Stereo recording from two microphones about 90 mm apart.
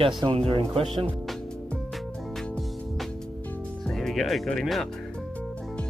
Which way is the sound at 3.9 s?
5° left (ahead or behind).